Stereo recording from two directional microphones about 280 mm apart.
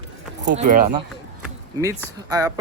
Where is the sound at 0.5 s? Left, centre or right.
Right.